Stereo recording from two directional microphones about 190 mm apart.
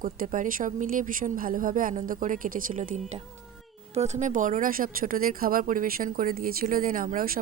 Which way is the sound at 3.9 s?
40° right (ahead or behind).